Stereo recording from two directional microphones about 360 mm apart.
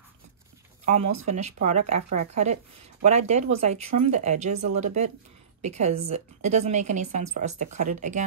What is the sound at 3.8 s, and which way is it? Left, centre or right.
Speech, right.